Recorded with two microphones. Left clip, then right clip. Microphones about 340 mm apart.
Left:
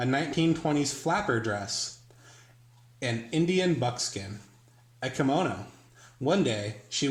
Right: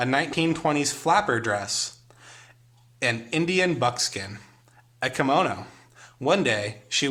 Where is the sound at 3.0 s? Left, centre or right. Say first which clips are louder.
Right 4 dB; right.